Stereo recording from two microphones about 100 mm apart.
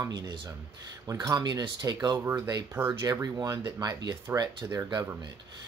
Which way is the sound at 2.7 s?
20° right (ahead or behind).